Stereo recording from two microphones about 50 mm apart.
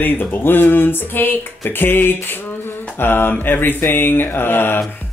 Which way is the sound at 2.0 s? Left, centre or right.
Left.